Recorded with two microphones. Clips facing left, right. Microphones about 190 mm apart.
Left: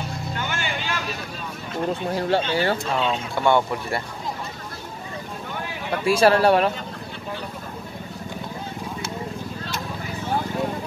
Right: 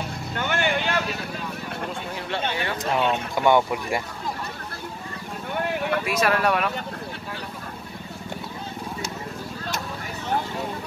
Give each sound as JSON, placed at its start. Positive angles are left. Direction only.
{"t": 0.4, "sound": "vehicle", "side_deg": -60}
{"t": 1.9, "sound": "speech", "side_deg": 40}
{"t": 2.8, "sound": "speech", "side_deg": -15}
{"t": 6.0, "sound": "speech", "side_deg": 30}